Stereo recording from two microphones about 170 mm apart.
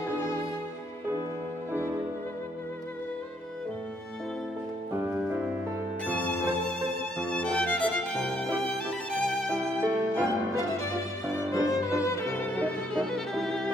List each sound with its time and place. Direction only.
1.7 s music: 15° right (ahead or behind)
4.9 s music: 10° right (ahead or behind)
6.0 s music: 10° left (ahead or behind)
9.8 s music: 10° right (ahead or behind)
11.5 s violin: 20° left (ahead or behind); by 13.7 s centre (ahead or behind)